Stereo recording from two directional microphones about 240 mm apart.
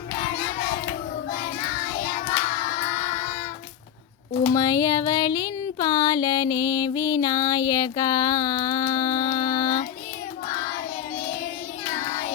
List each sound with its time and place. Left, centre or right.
4.5 s music: centre